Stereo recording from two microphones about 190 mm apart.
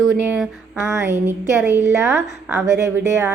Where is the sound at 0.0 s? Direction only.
5° right (ahead or behind).